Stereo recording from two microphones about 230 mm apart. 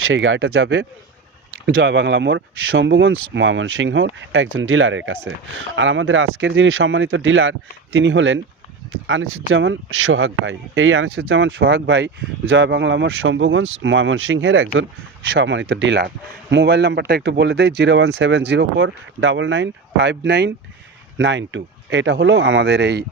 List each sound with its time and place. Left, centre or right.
0.0 s speech: right